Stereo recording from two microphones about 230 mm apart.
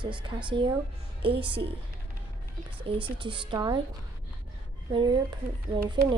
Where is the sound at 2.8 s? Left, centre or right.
Right.